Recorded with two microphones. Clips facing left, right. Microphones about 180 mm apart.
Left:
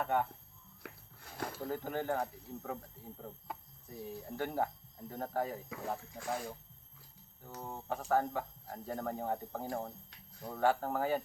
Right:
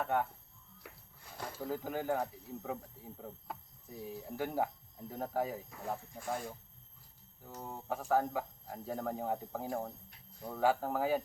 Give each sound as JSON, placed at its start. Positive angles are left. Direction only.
{"t": 0.0, "sound": "speech", "side_deg": 0}
{"t": 1.5, "sound": "speech", "side_deg": -5}
{"t": 5.6, "sound": "speech", "side_deg": 90}
{"t": 7.4, "sound": "speech", "side_deg": 0}